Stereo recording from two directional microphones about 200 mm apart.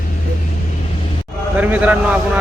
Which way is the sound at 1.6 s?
10° right (ahead or behind).